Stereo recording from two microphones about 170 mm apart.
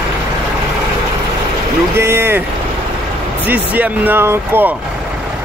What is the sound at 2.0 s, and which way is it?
Speech, 15° right (ahead or behind).